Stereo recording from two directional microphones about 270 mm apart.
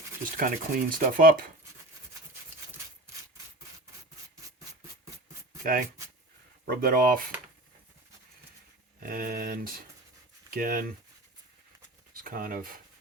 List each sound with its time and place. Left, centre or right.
0.3 s chopping: right
5.6 s chopping: right
9.0 s chopping: right
12.1 s speech: right